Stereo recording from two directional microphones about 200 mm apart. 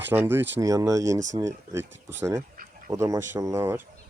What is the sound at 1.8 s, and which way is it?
Speech, 65° right (ahead or behind).